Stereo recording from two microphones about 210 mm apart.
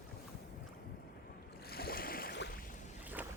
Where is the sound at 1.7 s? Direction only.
45° left (ahead or behind).